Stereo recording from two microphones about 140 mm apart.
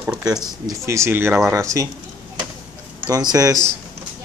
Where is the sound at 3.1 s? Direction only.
30° right (ahead or behind).